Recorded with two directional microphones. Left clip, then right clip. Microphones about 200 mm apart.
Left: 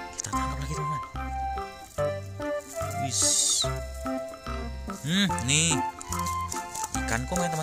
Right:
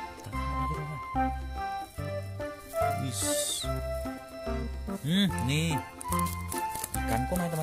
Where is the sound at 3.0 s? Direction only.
15° right (ahead or behind).